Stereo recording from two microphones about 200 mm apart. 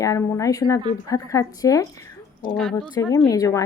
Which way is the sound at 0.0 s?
15° left (ahead or behind).